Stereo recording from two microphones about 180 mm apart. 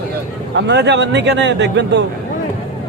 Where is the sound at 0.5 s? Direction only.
80° right.